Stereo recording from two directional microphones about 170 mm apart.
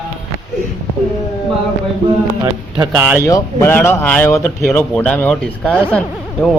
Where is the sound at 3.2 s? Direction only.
20° left (ahead or behind).